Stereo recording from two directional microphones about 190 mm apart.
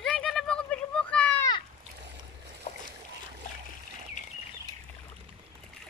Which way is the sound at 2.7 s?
40° left (ahead or behind).